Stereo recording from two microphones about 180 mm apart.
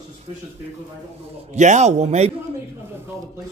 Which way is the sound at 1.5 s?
40° right (ahead or behind).